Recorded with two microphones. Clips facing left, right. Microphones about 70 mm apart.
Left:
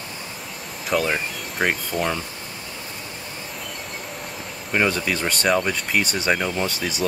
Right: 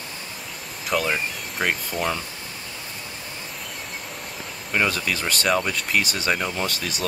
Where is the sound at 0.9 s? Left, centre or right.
Centre.